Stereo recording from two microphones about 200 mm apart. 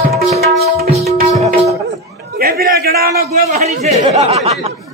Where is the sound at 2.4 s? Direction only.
50° right (ahead or behind); by 4.7 s 30° right (ahead or behind).